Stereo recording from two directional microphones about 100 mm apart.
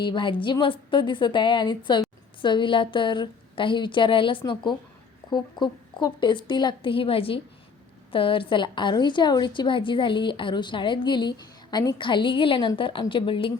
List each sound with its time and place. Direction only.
0.0 s a woman's voice: 55° left (ahead or behind)